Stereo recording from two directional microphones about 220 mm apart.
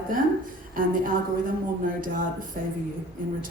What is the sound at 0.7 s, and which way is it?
A woman's voice, 40° right (ahead or behind).